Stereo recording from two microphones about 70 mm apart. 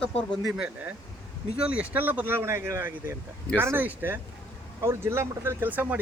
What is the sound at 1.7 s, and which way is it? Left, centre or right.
Speech, right.